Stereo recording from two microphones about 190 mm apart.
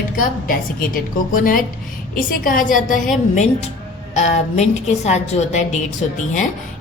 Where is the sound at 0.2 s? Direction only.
45° left (ahead or behind).